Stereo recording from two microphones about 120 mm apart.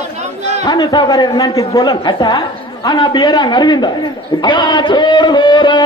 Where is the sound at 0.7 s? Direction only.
35° left (ahead or behind).